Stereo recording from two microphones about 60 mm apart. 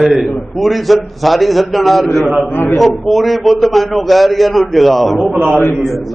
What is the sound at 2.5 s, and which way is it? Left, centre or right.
Speech, left.